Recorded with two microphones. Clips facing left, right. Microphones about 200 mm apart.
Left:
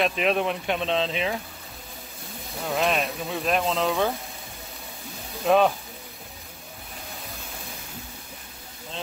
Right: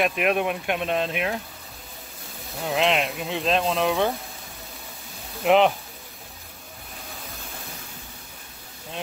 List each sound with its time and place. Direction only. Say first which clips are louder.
0.0 s speech: right 1 dB; 5° right (ahead or behind)
2.6 s speech: right 2 dB; 15° right (ahead or behind)
5.4 s speech: right 1 dB; 20° right (ahead or behind)